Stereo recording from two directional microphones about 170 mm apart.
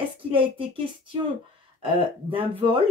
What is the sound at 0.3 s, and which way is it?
Speech, 30° right (ahead or behind).